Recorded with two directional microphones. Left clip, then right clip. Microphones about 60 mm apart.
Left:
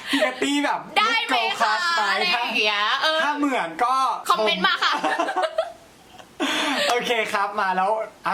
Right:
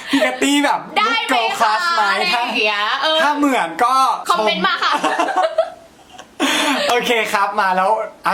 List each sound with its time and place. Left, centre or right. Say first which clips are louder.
0.3 s a man's voice: right 7 dB; right
0.9 s a woman's voice: right 1 dB; centre
3.2 s a man's voice: right 7 dB; centre
4.3 s a woman's voice: right 4 dB; centre
4.9 s a man's voice: right 6 dB; right
5.6 s a sound: right 7 dB; centre
6.4 s a sound: right 7 dB; centre
6.8 s speech: right 6 dB; centre